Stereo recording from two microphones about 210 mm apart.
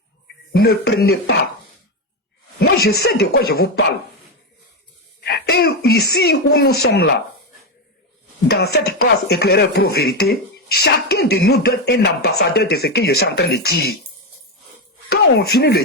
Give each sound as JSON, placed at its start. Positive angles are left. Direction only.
{"t": 0.5, "sound": "speech", "side_deg": 50}
{"t": 2.6, "sound": "speech", "side_deg": 50}
{"t": 5.2, "sound": "speech", "side_deg": 50}
{"t": 8.4, "sound": "speech", "side_deg": 50}
{"t": 15.1, "sound": "speech", "side_deg": 50}